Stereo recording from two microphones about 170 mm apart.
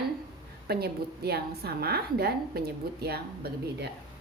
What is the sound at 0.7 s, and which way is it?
A woman's voice, 70° right (ahead or behind).